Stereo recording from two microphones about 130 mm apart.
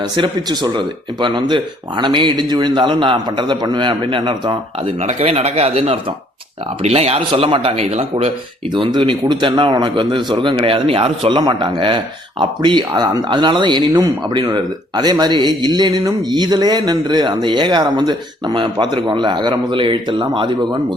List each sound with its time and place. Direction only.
0.0 s speech: 30° right (ahead or behind)
4.9 s speech: 50° right (ahead or behind)
8.7 s speech: 35° right (ahead or behind)